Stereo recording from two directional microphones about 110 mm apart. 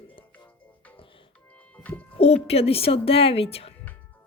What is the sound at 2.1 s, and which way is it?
Speech, 70° left (ahead or behind).